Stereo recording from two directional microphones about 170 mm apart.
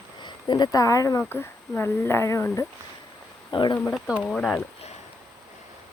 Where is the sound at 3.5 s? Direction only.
25° left (ahead or behind).